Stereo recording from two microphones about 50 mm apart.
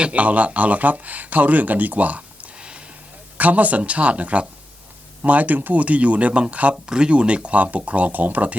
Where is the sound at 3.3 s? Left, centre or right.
Right.